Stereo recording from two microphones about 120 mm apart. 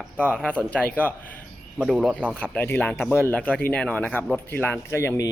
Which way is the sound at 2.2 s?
10° left (ahead or behind).